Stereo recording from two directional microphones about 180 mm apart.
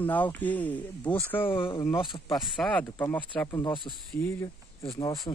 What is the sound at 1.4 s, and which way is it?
Speech, 30° left (ahead or behind).